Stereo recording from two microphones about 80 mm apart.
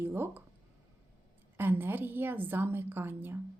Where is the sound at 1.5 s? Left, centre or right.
Right.